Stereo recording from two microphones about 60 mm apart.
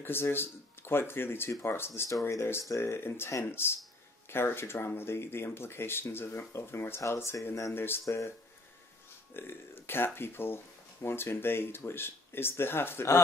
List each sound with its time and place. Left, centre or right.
0.0 s speech: left
7.7 s speech: left
8.0 s speech: left
9.3 s speech: left